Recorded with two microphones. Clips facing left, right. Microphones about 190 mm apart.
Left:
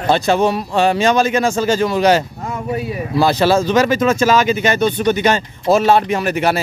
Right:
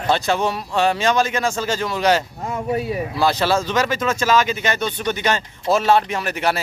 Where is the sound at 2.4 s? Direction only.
20° right (ahead or behind).